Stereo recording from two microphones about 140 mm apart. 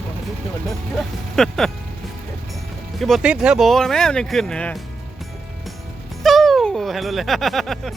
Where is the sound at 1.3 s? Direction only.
5° left (ahead or behind).